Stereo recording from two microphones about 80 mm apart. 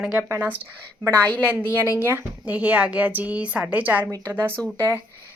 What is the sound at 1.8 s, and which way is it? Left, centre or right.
Speech, right.